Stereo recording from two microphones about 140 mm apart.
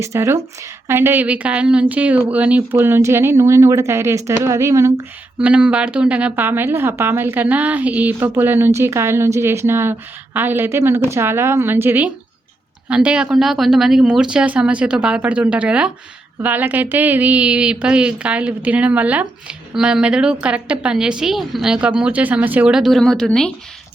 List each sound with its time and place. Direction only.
0.0 s a woman's voice: 20° right (ahead or behind)
5.4 s a woman's voice: 10° right (ahead or behind)